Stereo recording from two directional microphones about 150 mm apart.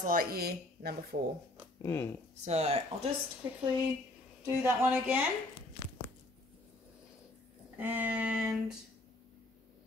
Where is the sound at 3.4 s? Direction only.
20° right (ahead or behind).